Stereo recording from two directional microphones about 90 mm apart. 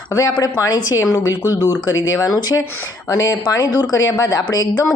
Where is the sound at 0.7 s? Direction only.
45° left (ahead or behind).